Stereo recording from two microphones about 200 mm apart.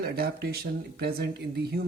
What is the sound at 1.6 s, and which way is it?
Speech, 50° right (ahead or behind).